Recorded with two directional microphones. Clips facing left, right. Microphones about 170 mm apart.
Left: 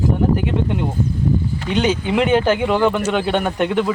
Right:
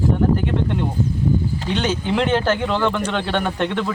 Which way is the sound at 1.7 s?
10° left (ahead or behind).